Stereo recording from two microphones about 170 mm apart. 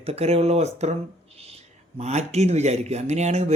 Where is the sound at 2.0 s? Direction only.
40° right (ahead or behind).